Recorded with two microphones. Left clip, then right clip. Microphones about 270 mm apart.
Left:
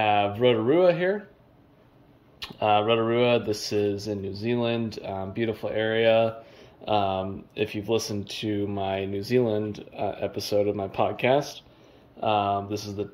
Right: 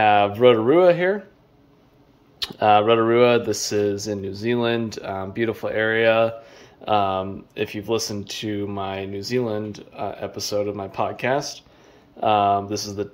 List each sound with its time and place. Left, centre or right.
0.0 s speech: centre
2.3 s speech: centre